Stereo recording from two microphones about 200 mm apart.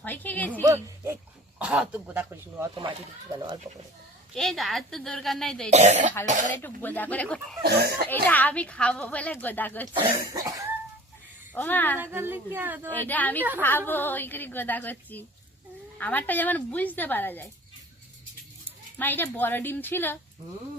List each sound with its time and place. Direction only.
0.0 s a woman's voice: 10° left (ahead or behind)
0.6 s speech: 15° right (ahead or behind)
4.4 s a woman's voice: centre (ahead or behind)
5.7 s speech: 35° right (ahead or behind)
6.6 s a woman's voice: 10° left (ahead or behind)
7.6 s speech: 50° right (ahead or behind)
8.1 s a woman's voice: 10° left (ahead or behind)
9.9 s cough: 20° right (ahead or behind)
11.5 s a woman's voice: 10° left (ahead or behind)
12.1 s speech: 10° right (ahead or behind)
12.9 s a woman's voice: 10° left (ahead or behind)
18.9 s a woman's voice: 10° left (ahead or behind)